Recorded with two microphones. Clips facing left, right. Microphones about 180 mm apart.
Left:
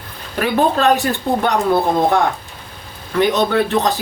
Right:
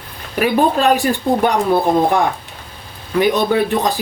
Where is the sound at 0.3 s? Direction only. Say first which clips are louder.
Right 1 dB; 10° right (ahead or behind).